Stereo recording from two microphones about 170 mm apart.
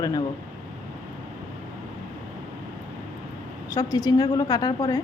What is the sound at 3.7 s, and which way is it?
A woman's voice, 20° left (ahead or behind).